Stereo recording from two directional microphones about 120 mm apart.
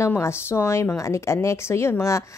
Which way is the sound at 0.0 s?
20° left (ahead or behind).